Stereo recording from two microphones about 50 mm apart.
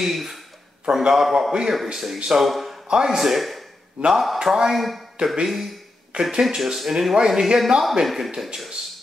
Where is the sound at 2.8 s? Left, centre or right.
Centre.